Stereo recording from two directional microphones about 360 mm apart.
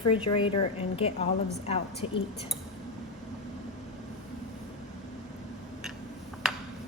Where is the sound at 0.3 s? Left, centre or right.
Centre.